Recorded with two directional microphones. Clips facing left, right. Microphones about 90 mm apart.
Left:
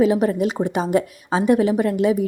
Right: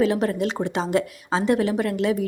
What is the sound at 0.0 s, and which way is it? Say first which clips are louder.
A woman's voice: left 4 dB; 15° left (ahead or behind).